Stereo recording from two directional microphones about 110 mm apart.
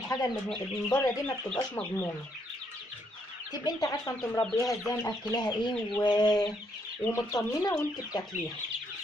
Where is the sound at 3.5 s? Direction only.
35° left (ahead or behind).